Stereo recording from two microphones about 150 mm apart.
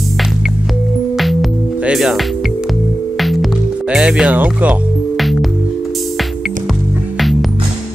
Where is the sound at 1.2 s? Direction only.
Centre (ahead or behind).